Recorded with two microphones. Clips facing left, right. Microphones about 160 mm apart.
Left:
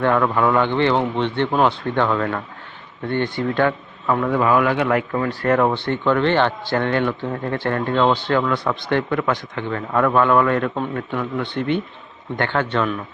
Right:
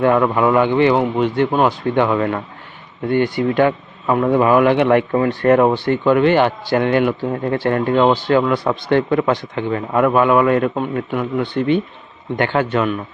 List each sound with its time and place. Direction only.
0.0 s a man's voice: 15° right (ahead or behind)